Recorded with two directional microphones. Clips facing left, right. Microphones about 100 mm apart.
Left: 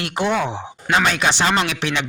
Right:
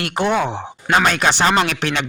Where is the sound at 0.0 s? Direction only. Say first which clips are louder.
Right 2 dB; 50° right (ahead or behind).